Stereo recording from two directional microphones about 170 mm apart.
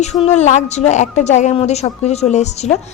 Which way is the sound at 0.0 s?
40° left (ahead or behind).